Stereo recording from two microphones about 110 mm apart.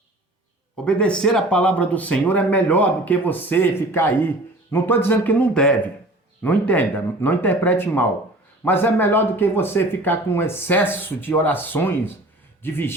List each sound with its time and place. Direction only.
0.9 s speech: 10° left (ahead or behind)